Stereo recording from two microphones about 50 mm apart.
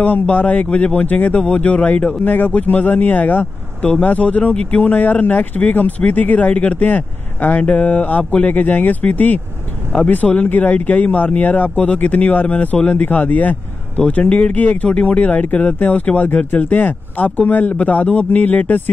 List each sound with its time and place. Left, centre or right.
0.0 s speech: left
2.2 s speech: left